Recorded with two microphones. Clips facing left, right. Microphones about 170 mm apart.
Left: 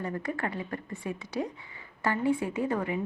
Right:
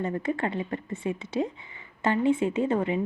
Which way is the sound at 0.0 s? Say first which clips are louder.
Right 5 dB; 25° right (ahead or behind).